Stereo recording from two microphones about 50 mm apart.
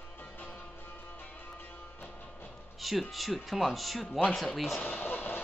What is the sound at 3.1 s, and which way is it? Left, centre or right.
Speech, centre.